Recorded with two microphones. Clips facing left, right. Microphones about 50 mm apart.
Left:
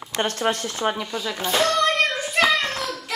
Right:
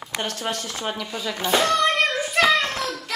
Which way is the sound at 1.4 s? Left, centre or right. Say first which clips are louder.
Right 1 dB; centre.